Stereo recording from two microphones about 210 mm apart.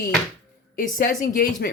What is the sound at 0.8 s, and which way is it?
Speech, 40° left (ahead or behind).